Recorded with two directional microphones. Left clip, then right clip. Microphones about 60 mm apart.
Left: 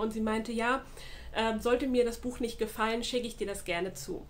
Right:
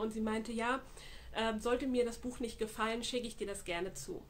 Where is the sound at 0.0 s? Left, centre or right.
Right.